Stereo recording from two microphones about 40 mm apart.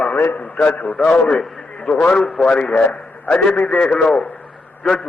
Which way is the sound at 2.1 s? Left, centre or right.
Centre.